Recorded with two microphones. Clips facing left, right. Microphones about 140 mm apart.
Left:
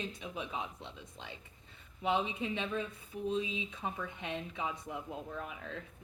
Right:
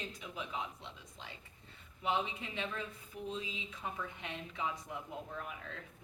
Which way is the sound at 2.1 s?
25° left (ahead or behind).